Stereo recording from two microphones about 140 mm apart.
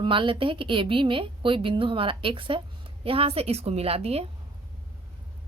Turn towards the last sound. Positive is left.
turn(degrees=-45)  # may be behind; listen again after turning